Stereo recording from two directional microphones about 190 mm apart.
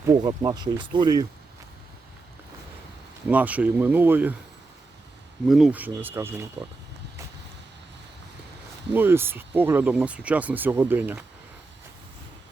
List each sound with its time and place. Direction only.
0.1 s speech: 20° right (ahead or behind)
3.2 s speech: 10° right (ahead or behind)
5.5 s speech: centre (ahead or behind)
8.9 s speech: 10° right (ahead or behind)